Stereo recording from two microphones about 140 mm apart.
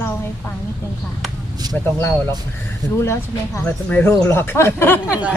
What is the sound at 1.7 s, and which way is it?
Speech, 10° left (ahead or behind).